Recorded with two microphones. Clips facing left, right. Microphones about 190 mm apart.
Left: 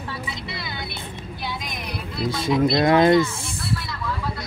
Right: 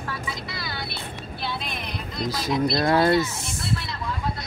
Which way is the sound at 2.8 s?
20° left (ahead or behind).